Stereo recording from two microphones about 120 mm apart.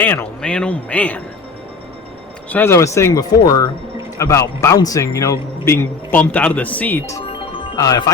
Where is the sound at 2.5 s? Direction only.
20° left (ahead or behind).